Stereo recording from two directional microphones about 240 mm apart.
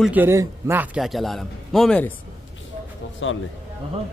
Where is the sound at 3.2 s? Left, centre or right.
Left.